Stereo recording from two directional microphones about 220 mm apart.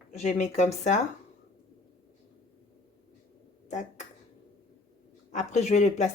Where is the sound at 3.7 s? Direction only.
35° left (ahead or behind).